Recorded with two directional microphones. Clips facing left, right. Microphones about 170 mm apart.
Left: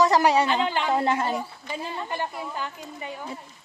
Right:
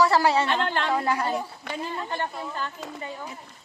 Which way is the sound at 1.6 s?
70° right (ahead or behind).